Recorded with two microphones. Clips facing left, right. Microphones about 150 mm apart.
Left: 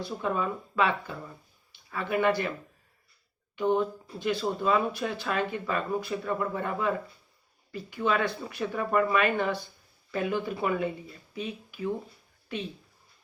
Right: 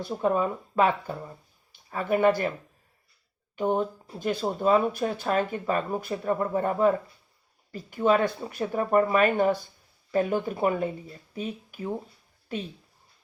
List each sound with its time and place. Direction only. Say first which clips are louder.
0.0 s speech: right 5 dB; 40° right (ahead or behind)
3.6 s speech: even; 40° right (ahead or behind)